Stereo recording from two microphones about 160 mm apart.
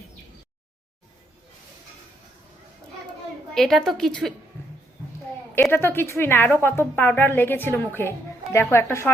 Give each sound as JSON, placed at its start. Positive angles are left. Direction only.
{"t": 3.5, "sound": "a woman's voice", "side_deg": 0}
{"t": 5.7, "sound": "a woman's voice", "side_deg": 15}